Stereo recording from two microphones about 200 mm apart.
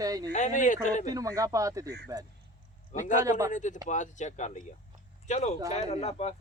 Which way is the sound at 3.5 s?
40° left (ahead or behind).